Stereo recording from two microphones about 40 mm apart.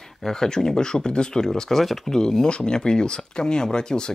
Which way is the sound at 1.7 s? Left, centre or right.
Centre.